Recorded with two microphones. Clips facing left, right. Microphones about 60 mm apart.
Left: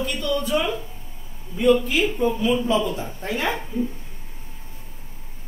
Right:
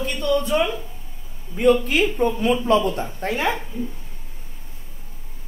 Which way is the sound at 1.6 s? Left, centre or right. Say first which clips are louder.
Right 1 dB; right.